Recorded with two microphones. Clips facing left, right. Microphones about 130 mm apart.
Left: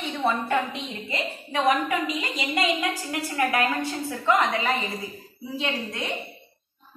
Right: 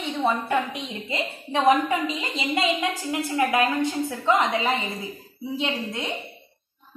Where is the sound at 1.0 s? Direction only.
25° right (ahead or behind).